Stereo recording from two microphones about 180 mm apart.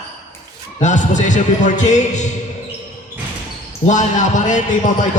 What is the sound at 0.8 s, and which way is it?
A man's voice, 45° left (ahead or behind).